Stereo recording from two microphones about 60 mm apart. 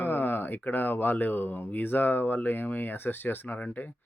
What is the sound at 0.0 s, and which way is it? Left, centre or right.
Speech, left.